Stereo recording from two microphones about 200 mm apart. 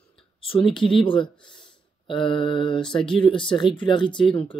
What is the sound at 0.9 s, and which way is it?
Speech, 25° left (ahead or behind).